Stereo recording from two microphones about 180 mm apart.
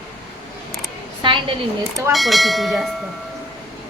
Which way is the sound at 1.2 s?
25° right (ahead or behind).